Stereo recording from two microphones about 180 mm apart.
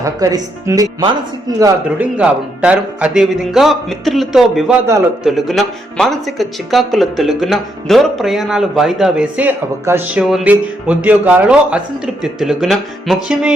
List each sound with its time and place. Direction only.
0.0 s speech: 20° right (ahead or behind)
2.0 s speech: 5° right (ahead or behind)